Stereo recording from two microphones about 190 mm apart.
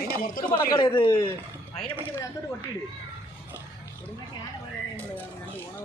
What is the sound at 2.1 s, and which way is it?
Speech, 10° left (ahead or behind).